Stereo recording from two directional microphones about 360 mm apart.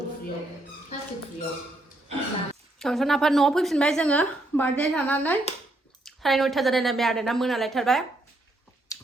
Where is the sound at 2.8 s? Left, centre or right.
Centre.